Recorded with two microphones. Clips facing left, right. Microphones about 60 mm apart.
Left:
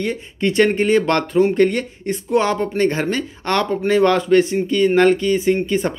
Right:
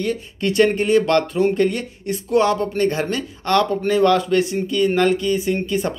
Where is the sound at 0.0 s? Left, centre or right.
Left.